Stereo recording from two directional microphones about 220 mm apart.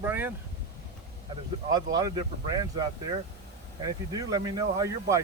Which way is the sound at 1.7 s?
15° right (ahead or behind).